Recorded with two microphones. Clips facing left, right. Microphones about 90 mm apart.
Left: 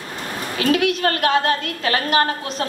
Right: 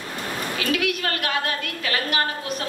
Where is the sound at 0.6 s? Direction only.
35° left (ahead or behind).